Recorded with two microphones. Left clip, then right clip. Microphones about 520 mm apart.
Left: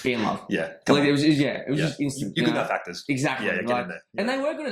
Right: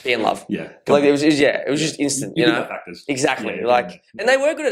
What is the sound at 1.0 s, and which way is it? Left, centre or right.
Speech, right.